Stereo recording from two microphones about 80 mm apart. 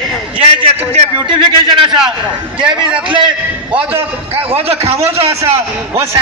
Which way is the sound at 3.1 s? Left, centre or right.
Right.